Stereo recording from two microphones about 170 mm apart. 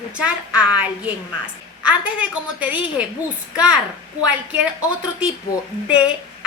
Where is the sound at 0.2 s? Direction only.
5° right (ahead or behind).